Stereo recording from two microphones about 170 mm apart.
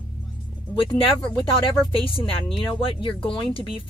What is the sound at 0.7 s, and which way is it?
Speech, 30° left (ahead or behind).